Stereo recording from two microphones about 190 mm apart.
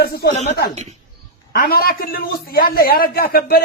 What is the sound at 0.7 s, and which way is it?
Speech, 35° right (ahead or behind).